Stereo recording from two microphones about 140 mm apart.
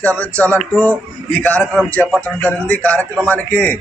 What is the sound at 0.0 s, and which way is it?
A man's voice, 10° left (ahead or behind).